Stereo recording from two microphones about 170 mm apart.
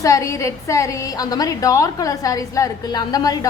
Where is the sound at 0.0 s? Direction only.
20° left (ahead or behind).